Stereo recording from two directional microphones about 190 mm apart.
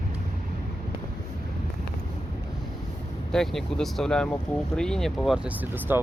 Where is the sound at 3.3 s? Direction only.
Centre (ahead or behind).